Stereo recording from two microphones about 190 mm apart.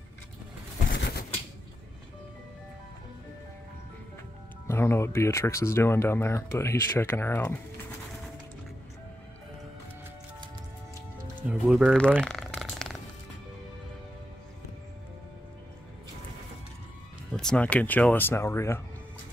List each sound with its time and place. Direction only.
0.9 s typewriter: 65° left (ahead or behind)
4.6 s speech: 15° left (ahead or behind)
11.4 s speech: 5° right (ahead or behind)
12.0 s a sound: 5° left (ahead or behind)
17.3 s speech: 5° left (ahead or behind)